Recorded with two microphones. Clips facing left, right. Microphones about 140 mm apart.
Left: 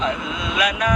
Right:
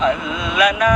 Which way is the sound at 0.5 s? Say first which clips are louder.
Right 6 dB; 60° right (ahead or behind).